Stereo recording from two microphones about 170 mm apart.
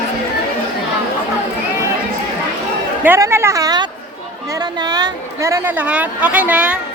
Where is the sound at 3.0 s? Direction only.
15° right (ahead or behind).